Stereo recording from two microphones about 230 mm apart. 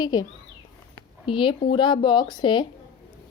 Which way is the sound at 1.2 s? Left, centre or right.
Left.